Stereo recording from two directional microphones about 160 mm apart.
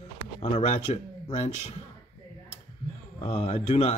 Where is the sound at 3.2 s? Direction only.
40° left (ahead or behind).